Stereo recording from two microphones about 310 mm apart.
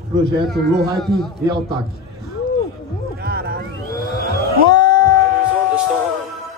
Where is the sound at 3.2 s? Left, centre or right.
Right.